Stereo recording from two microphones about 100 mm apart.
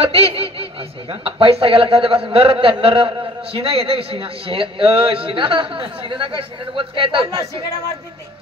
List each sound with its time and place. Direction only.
0.0 s a man's voice: 75° right (ahead or behind); by 7.2 s 60° right (ahead or behind)